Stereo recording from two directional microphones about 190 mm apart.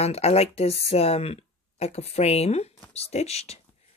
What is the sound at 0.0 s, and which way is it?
Speech, 35° left (ahead or behind).